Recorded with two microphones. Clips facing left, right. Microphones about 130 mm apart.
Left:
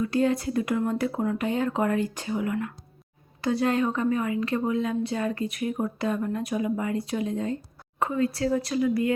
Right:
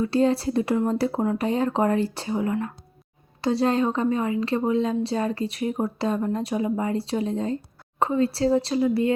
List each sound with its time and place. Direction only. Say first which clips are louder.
0.0 s a woman's voice: right 3 dB; 30° right (ahead or behind)